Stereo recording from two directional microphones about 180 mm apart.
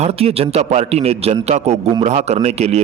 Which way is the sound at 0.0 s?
35° right (ahead or behind).